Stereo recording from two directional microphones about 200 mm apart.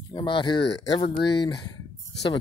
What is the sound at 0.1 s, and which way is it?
Speech, 25° left (ahead or behind).